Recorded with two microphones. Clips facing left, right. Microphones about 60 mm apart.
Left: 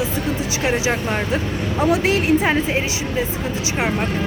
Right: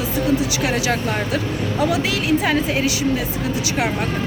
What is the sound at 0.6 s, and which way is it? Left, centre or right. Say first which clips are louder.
Speech: even; left.